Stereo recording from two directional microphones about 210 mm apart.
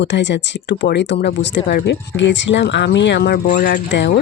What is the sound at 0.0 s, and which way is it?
Speech, 55° left (ahead or behind).